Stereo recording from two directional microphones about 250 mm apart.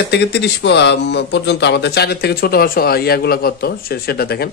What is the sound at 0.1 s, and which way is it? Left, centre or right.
Speech, left.